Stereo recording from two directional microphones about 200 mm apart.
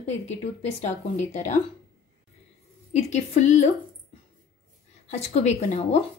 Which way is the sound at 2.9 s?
35° left (ahead or behind).